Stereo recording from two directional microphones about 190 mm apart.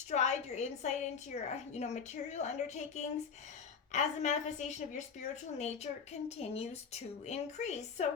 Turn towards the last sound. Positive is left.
turn(degrees=35)  # may be behind; listen again after turning